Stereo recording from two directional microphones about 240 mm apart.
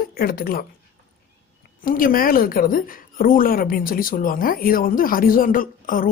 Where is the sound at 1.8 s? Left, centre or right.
Left.